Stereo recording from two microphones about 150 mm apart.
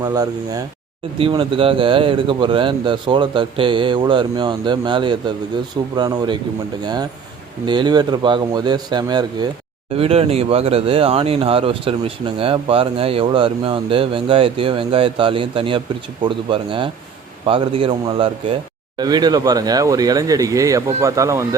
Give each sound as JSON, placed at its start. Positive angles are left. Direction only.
{"t": 0.0, "sound": "speech", "side_deg": -25}
{"t": 1.2, "sound": "speech", "side_deg": -35}
{"t": 9.9, "sound": "speech", "side_deg": -40}